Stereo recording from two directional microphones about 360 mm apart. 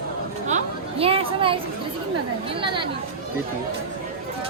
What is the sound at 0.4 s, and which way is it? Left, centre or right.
Chatter, centre.